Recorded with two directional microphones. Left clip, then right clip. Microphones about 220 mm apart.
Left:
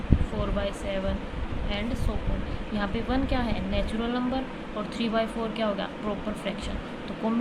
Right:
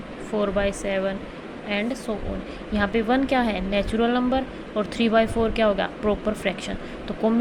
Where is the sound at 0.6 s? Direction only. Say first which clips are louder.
Right 6 dB; 30° right (ahead or behind).